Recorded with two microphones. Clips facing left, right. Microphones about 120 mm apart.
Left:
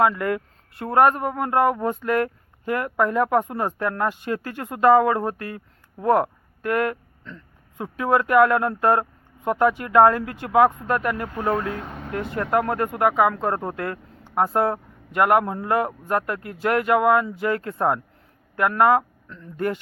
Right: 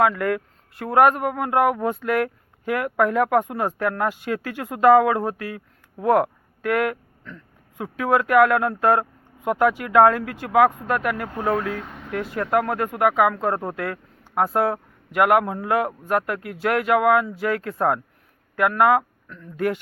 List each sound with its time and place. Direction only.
0.2 s speech: centre (ahead or behind)
5.4 s speech: 45° left (ahead or behind)
6.0 s speech: 5° right (ahead or behind)